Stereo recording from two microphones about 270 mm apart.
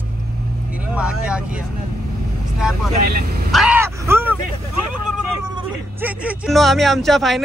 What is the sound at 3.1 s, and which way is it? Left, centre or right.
Speech, right.